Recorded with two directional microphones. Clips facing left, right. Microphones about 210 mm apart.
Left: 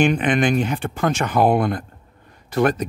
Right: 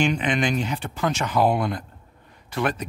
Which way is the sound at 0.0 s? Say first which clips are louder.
Left 5 dB; 55° left (ahead or behind).